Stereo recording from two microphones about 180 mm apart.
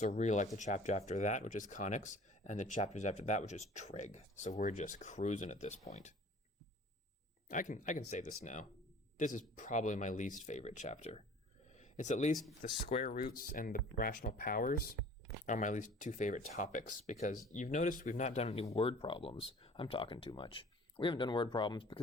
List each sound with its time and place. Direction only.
0.0 s speech: 40° left (ahead or behind)
7.4 s speech: 45° left (ahead or behind)
11.7 s a sound: 40° left (ahead or behind)
12.7 s speech: 35° left (ahead or behind)
13.1 s speech: 55° left (ahead or behind); by 21.9 s 25° left (ahead or behind)